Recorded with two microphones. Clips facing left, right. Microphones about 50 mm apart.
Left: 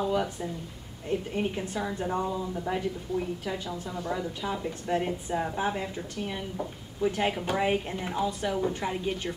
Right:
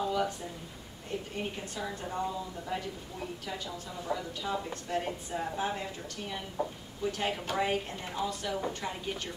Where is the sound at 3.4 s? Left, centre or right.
Centre.